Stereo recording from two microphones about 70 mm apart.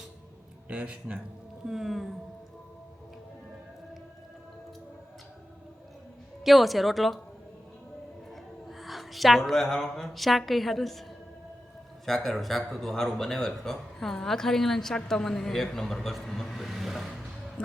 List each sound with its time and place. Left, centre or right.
0.7 s speech: centre
1.6 s speech: centre
6.4 s speech: centre
8.8 s speech: centre
12.0 s speech: centre